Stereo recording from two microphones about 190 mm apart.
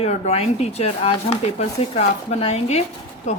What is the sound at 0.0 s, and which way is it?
Speech, 35° left (ahead or behind).